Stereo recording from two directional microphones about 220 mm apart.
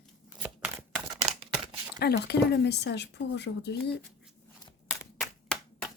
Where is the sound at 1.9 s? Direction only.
45° left (ahead or behind).